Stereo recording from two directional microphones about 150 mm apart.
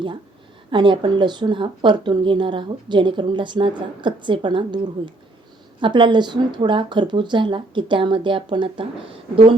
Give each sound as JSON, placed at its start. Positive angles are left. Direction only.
{"t": 0.7, "sound": "speech", "side_deg": -35}